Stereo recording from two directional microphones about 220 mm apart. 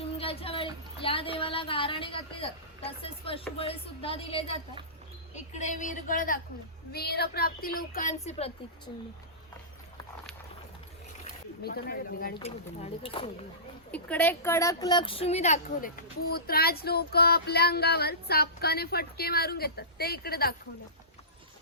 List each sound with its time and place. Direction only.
0.0 s a woman's voice: 25° left (ahead or behind)
11.6 s child singing: 45° left (ahead or behind)
12.4 s speech: 30° left (ahead or behind)
13.9 s speech: 5° left (ahead or behind); by 15.9 s 30° left (ahead or behind)
16.3 s child singing: 45° left (ahead or behind)